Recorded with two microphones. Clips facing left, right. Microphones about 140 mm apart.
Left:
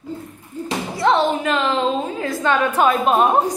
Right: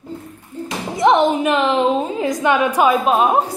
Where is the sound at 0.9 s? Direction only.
15° right (ahead or behind).